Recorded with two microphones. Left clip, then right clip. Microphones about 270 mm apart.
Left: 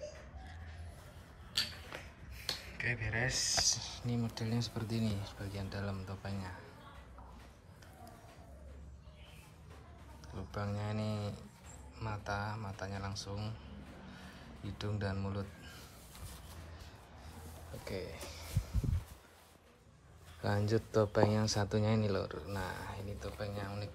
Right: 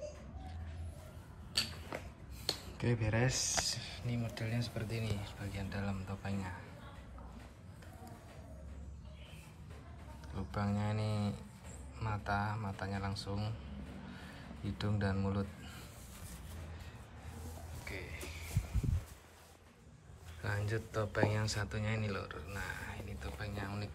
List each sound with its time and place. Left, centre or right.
1.5 s a sound: centre
3.1 s speech: centre
3.6 s speech: centre
10.3 s a man's voice: centre
14.6 s a man's voice: centre
17.8 s a sound: centre
20.4 s speech: centre